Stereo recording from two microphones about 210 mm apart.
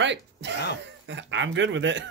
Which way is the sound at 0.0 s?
60° right (ahead or behind).